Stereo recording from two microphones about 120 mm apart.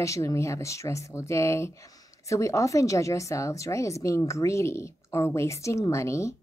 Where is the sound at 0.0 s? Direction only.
25° left (ahead or behind).